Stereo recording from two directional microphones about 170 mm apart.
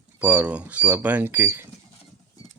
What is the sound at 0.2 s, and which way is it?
Speech, 10° right (ahead or behind).